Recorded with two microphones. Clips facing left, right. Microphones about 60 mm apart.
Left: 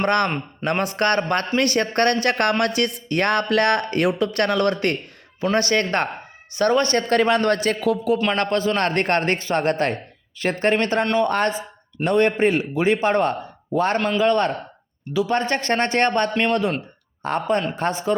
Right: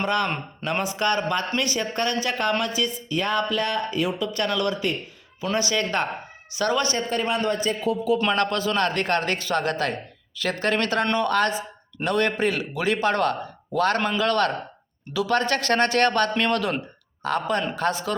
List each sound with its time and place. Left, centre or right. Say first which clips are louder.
0.0 s speech: left 4 dB; left
7.1 s a man's voice: left 6 dB; left
8.4 s a man's voice: left 2 dB; left